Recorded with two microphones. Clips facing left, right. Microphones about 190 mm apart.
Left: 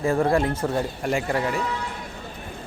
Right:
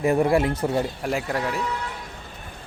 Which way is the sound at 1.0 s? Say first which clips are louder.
Left 2 dB; centre (ahead or behind).